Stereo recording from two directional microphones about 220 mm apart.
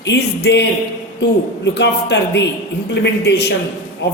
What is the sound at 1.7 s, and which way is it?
A woman's voice, 50° left (ahead or behind).